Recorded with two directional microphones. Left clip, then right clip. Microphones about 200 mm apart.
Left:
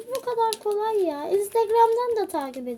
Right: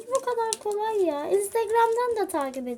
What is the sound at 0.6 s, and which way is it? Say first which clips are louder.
Speech: left 1 dB; 5° right (ahead or behind).